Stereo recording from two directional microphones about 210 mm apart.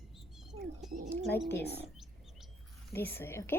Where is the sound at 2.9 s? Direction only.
10° left (ahead or behind).